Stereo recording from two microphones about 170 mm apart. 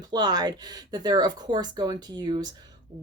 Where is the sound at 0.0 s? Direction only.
25° right (ahead or behind).